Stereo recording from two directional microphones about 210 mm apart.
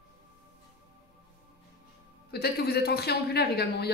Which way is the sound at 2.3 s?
50° left (ahead or behind).